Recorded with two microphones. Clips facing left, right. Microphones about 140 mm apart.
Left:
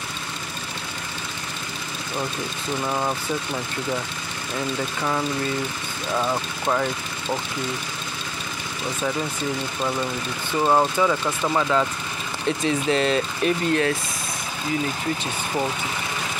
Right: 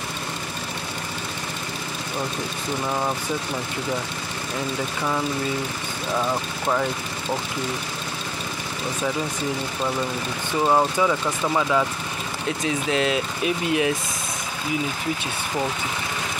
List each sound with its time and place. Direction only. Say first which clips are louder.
2.9 s speech: even; centre (ahead or behind)
6.1 s speech: left 1 dB; 5° right (ahead or behind)
10.6 s speech: even; centre (ahead or behind)